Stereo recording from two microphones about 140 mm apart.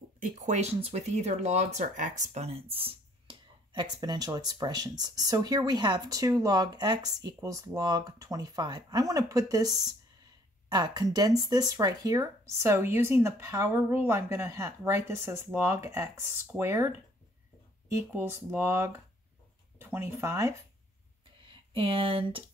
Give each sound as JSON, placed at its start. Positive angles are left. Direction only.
{"t": 0.2, "sound": "speech", "side_deg": -55}
{"t": 21.7, "sound": "speech", "side_deg": -40}